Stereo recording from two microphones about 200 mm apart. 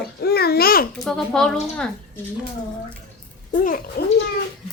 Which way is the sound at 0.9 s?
Centre (ahead or behind).